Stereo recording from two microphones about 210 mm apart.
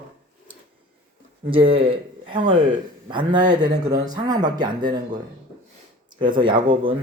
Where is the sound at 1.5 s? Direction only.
25° right (ahead or behind).